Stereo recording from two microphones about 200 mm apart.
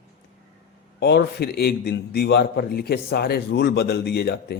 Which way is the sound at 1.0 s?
55° left (ahead or behind).